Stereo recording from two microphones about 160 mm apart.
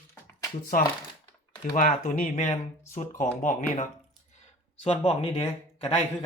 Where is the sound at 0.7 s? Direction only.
60° left (ahead or behind).